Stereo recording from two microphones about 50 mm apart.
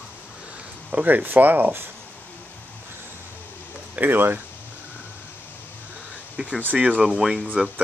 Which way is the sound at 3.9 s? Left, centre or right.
Right.